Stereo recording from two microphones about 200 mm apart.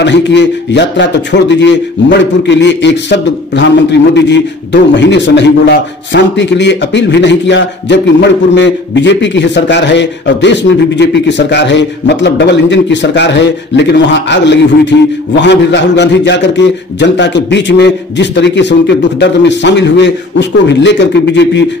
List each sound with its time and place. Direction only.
0.0 s a man's voice: 60° left (ahead or behind)